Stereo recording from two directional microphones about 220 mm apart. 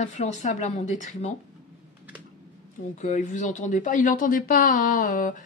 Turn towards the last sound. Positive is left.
turn(degrees=35)  # may be behind; listen again after turning